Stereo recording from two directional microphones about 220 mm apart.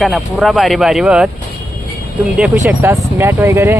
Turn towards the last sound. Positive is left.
turn(degrees=-10)  # may be behind; listen again after turning